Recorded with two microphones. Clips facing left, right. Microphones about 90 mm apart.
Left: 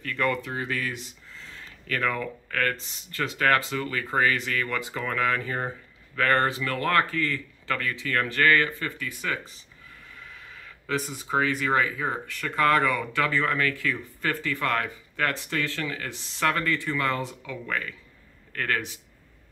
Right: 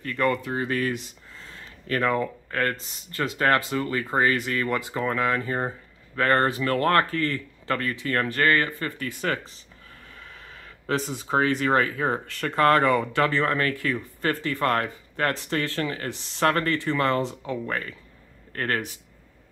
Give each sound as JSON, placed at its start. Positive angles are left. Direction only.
{"t": 0.0, "sound": "a man's voice", "side_deg": -30}
{"t": 11.1, "sound": "a man's voice", "side_deg": -35}